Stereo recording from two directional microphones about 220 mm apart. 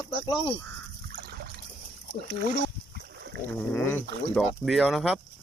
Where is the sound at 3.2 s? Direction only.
50° right (ahead or behind).